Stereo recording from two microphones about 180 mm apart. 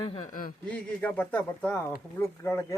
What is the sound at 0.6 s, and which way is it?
Speech, 10° left (ahead or behind).